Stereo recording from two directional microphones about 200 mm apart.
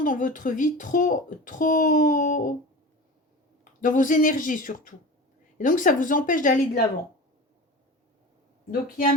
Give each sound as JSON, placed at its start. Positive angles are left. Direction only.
{"t": 0.0, "sound": "speech", "side_deg": 40}
{"t": 3.6, "sound": "speech", "side_deg": 40}
{"t": 8.7, "sound": "speech", "side_deg": 45}